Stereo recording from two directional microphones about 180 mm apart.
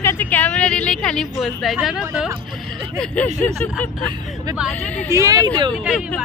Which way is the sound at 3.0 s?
10° left (ahead or behind).